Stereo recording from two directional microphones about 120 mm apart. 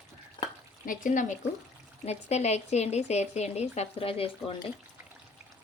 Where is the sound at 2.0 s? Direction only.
65° left (ahead or behind).